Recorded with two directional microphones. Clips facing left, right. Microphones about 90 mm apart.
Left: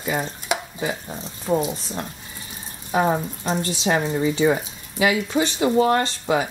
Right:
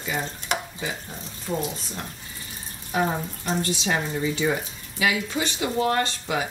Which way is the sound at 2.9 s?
30° left (ahead or behind).